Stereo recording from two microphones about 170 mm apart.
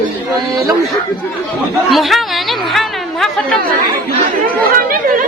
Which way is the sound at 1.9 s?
Centre (ahead or behind).